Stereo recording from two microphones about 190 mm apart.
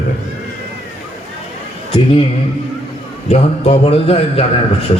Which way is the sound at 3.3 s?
30° left (ahead or behind).